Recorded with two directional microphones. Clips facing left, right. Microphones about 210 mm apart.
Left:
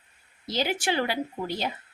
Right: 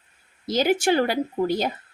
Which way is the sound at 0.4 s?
45° right (ahead or behind).